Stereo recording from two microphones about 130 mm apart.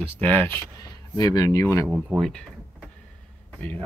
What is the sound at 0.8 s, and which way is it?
Speech, 30° left (ahead or behind).